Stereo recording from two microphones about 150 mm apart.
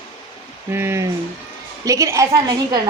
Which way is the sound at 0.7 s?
15° right (ahead or behind).